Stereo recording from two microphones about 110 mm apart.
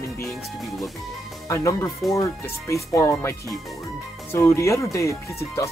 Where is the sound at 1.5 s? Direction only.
25° left (ahead or behind).